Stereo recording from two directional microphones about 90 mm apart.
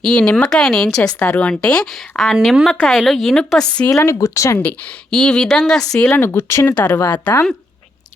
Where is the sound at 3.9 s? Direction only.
30° left (ahead or behind).